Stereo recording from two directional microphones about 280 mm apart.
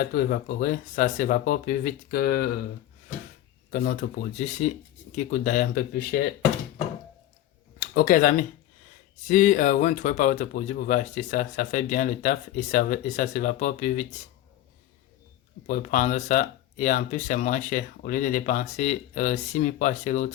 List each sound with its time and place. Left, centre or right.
0.0 s speech: left
3.7 s speech: left
7.9 s speech: left
15.6 s speech: left